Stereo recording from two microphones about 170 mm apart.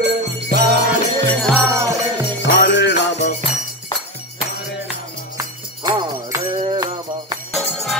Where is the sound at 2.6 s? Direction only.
90° left.